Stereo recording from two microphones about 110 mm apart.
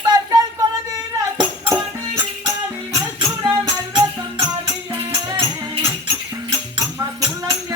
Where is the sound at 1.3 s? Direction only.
40° right (ahead or behind).